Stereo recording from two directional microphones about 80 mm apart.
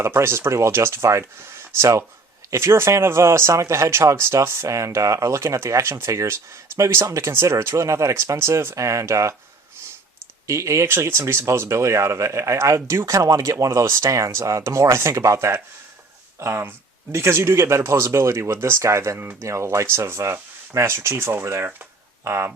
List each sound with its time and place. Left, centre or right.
0.0 s speech: right
10.4 s speech: right